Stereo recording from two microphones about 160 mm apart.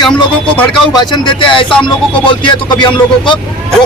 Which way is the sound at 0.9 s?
25° left (ahead or behind).